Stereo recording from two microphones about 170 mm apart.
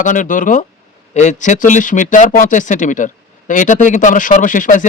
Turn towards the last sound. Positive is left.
turn(degrees=50)  # may be behind; listen again after turning